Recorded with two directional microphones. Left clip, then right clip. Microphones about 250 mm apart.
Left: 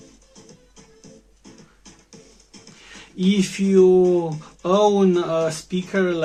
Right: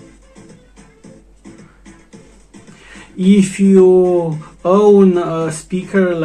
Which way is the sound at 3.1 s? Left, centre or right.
Left.